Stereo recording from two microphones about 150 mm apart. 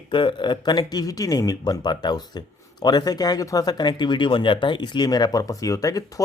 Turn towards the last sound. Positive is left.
turn(degrees=25)  # may be behind; listen again after turning